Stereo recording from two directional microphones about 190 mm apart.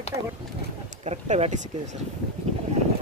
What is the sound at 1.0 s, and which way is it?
Speech, 35° right (ahead or behind).